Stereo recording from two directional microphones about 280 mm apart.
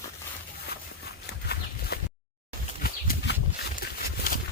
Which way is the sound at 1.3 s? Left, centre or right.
Left.